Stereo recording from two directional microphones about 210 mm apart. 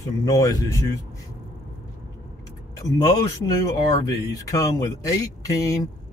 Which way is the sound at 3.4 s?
15° left (ahead or behind).